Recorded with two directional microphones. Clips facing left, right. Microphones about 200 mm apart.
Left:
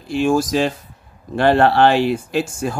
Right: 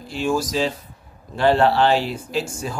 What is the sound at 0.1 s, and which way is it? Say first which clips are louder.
Speech: left 5 dB; 50° left (ahead or behind).